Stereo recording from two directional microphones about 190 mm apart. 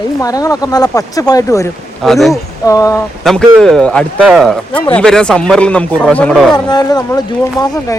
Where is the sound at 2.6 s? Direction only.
15° left (ahead or behind).